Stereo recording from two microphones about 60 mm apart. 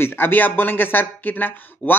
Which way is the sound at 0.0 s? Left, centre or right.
Left.